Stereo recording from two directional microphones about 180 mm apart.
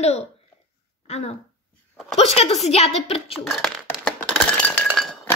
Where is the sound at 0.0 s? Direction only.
35° left (ahead or behind).